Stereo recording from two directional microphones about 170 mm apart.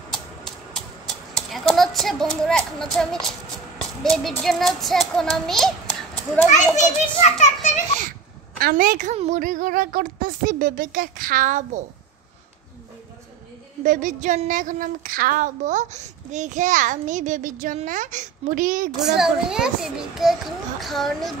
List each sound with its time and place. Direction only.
0.1 s a sound: centre (ahead or behind)
1.3 s a child's voice: centre (ahead or behind)
6.7 s a child's voice: 45° left (ahead or behind)
8.5 s a woman's voice: 60° right (ahead or behind)
13.8 s a woman's voice: 50° right (ahead or behind)
19.1 s a child's voice: 5° right (ahead or behind)